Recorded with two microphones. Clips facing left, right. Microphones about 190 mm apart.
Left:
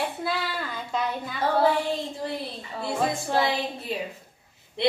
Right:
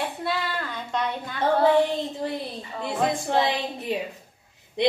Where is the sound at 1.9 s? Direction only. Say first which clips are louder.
Right 2 dB; 20° right (ahead or behind).